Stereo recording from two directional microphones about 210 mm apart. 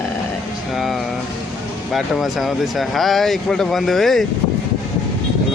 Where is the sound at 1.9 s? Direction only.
Centre (ahead or behind).